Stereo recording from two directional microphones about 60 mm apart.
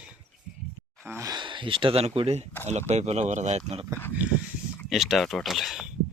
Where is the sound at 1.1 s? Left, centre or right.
Right.